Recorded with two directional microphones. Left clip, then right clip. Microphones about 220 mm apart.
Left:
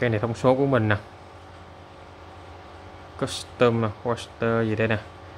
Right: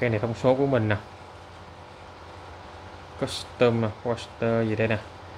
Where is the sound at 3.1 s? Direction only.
10° left (ahead or behind).